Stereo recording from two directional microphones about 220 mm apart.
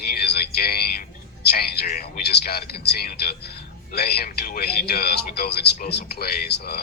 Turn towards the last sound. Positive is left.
turn(degrees=45)  # may be behind; listen again after turning